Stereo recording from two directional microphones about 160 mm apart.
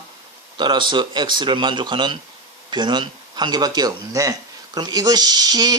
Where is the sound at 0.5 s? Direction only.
30° right (ahead or behind).